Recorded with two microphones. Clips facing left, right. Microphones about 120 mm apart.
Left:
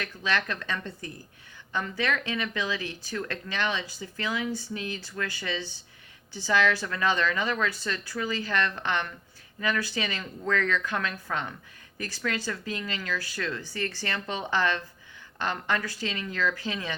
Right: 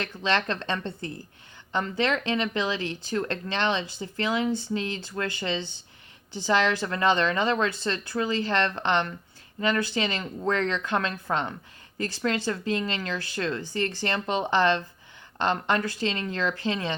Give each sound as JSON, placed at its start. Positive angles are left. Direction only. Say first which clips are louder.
{"t": 0.0, "sound": "speech", "louder": "right 3 dB", "side_deg": -25}
{"t": 2.0, "sound": "speech", "louder": "right 4 dB", "side_deg": -25}